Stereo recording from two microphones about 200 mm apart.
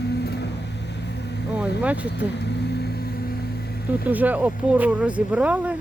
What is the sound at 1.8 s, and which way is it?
Speech, 5° right (ahead or behind).